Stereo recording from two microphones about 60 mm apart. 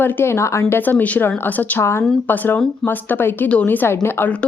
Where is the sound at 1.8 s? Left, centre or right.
Left.